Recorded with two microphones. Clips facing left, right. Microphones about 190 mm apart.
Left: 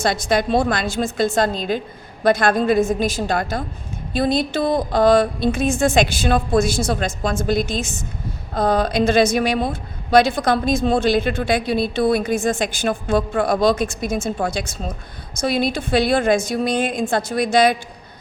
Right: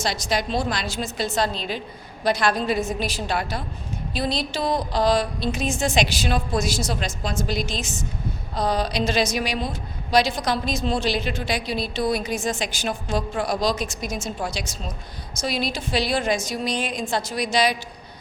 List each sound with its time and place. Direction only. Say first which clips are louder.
0.0 s a woman's voice: left 6 dB; 55° left (ahead or behind)